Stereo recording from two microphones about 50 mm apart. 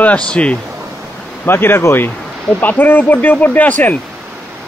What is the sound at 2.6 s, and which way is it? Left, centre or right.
Speech, left.